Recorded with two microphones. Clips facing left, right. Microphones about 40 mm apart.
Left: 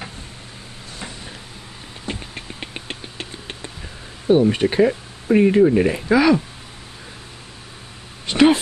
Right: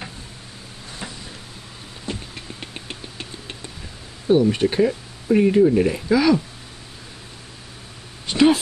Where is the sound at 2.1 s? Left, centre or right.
Left.